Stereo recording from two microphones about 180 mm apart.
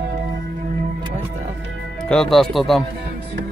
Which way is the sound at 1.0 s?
40° right (ahead or behind).